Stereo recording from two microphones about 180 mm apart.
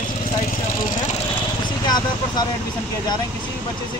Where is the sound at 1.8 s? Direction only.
20° left (ahead or behind).